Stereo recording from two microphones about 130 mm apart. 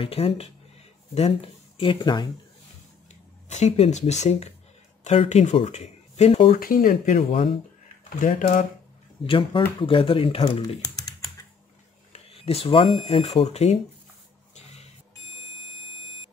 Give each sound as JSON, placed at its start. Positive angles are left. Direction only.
{"t": 0.0, "sound": "speech", "side_deg": 50}
{"t": 3.4, "sound": "speech", "side_deg": 60}
{"t": 6.5, "sound": "speech", "side_deg": 90}
{"t": 8.0, "sound": "speech", "side_deg": 80}
{"t": 9.2, "sound": "speech", "side_deg": 40}
{"t": 12.1, "sound": "speech", "side_deg": 50}
{"t": 14.5, "sound": "a sound", "side_deg": 55}